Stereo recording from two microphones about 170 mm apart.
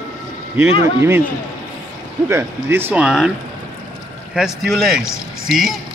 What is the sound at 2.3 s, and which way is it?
Speech, 15° right (ahead or behind).